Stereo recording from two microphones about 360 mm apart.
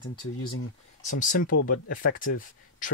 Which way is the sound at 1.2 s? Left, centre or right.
Left.